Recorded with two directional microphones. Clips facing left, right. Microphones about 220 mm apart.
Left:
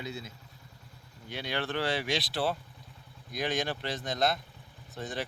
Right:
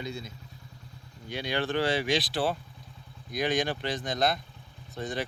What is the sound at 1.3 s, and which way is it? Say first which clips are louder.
Speech: right 4 dB; centre (ahead or behind).